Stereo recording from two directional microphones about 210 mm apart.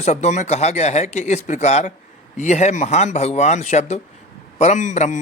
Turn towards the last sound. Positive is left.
turn(degrees=35)  # may be behind; listen again after turning